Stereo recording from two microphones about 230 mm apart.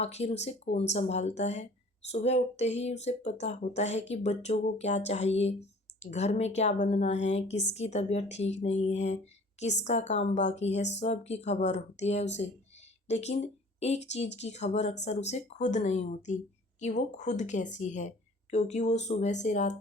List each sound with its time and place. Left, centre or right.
0.0 s a woman's voice: left